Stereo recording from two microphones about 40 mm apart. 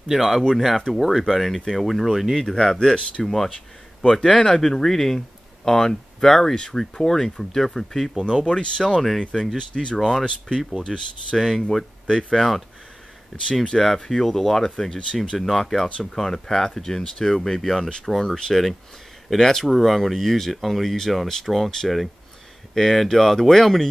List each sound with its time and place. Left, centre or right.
0.1 s speech: centre
2.3 s speech: centre
8.5 s speech: left
9.9 s speech: centre
10.8 s speech: centre
11.3 s speech: centre
12.1 s speech: centre
12.4 s speech: centre
15.1 s speech: centre